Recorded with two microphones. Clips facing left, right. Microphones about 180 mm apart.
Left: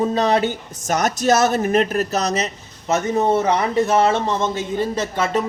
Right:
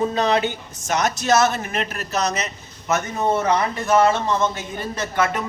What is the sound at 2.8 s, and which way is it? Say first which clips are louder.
A man's voice: left 3 dB; 30° left (ahead or behind).